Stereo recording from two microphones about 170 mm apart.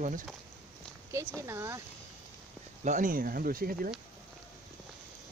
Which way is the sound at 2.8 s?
50° right (ahead or behind).